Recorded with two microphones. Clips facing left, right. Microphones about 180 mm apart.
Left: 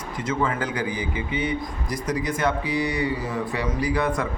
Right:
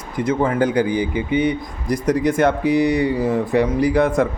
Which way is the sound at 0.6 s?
60° right (ahead or behind).